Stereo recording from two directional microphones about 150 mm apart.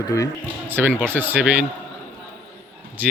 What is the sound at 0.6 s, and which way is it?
Speech, 15° right (ahead or behind).